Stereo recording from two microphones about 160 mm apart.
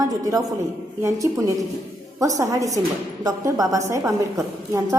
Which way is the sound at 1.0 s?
20° right (ahead or behind).